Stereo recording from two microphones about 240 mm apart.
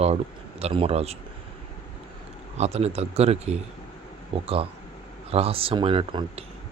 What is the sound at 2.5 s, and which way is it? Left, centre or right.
Speech, right.